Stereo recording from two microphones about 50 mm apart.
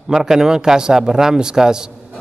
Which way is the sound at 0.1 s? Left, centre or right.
Centre.